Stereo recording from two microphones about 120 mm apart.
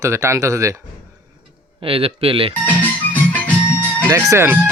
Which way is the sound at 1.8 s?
50° right (ahead or behind).